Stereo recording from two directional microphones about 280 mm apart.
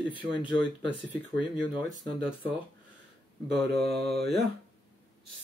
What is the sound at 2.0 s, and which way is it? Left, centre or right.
Speech, centre.